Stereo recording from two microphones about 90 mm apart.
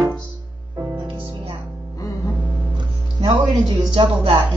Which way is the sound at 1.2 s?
90° right.